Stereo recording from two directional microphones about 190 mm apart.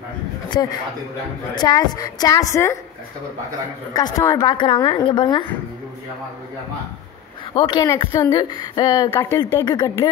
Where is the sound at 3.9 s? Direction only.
20° left (ahead or behind).